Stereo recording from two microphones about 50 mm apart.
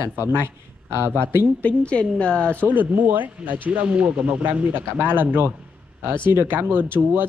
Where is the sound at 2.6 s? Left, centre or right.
Right.